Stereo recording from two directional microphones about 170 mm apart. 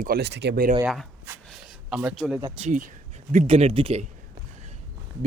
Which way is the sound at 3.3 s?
45° right (ahead or behind).